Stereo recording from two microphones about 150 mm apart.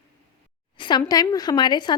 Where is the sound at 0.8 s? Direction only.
30° left (ahead or behind).